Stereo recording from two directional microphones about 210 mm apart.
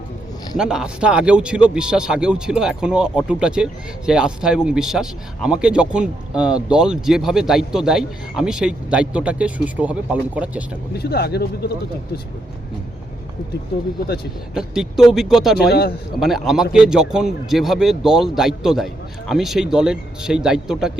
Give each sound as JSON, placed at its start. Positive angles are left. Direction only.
{"t": 0.5, "sound": "speech", "side_deg": -5}
{"t": 10.9, "sound": "speech", "side_deg": 50}
{"t": 14.5, "sound": "speech", "side_deg": 0}
{"t": 15.5, "sound": "speech", "side_deg": 50}
{"t": 16.2, "sound": "speech", "side_deg": 0}